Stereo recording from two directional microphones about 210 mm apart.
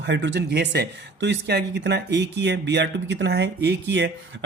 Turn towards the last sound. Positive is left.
turn(degrees=-55)  # may be behind; listen again after turning